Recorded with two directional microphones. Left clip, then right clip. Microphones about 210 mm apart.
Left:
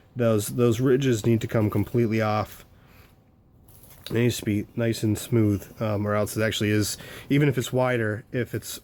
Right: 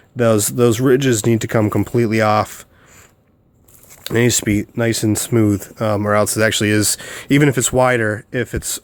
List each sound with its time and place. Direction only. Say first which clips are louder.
0.2 s speech: right 9 dB; 25° right (ahead or behind)
4.0 s speech: right 9 dB; 30° right (ahead or behind)